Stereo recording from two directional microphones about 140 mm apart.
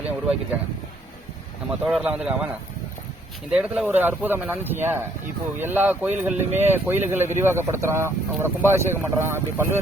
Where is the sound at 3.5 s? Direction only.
5° right (ahead or behind).